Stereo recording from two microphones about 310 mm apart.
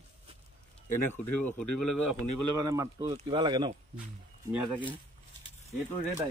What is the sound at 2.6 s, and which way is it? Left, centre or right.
Speech, centre.